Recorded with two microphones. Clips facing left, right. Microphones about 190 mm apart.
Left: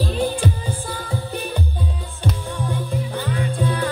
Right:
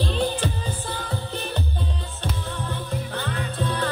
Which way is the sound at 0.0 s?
10° left (ahead or behind).